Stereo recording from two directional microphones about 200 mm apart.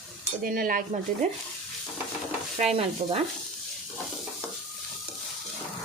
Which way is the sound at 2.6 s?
30° right (ahead or behind).